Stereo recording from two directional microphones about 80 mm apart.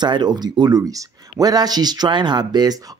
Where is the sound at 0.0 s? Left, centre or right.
Right.